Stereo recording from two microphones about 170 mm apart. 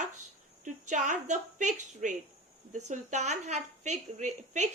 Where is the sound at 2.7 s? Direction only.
45° right (ahead or behind).